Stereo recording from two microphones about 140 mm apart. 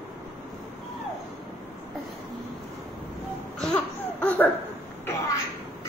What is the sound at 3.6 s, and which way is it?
Laughter, 10° left (ahead or behind).